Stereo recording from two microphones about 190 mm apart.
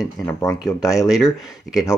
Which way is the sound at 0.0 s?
20° left (ahead or behind).